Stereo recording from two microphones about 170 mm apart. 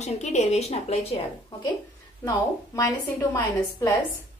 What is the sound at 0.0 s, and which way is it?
A woman's voice, 45° left (ahead or behind).